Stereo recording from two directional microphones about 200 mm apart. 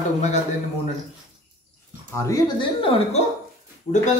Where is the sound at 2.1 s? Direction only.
15° left (ahead or behind).